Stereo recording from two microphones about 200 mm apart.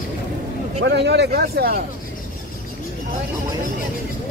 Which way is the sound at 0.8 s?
55° right (ahead or behind).